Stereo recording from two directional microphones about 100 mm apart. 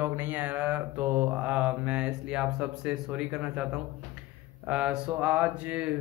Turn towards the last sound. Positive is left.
turn(degrees=-15)  # may be behind; listen again after turning